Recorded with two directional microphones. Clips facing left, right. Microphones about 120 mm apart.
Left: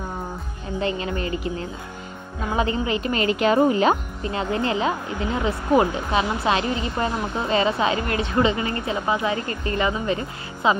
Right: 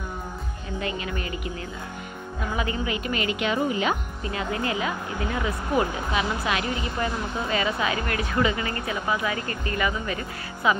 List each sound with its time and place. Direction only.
0.7 s a woman's voice: 30° left (ahead or behind)
3.5 s speech: 50° left (ahead or behind)
3.8 s speech: 30° left (ahead or behind)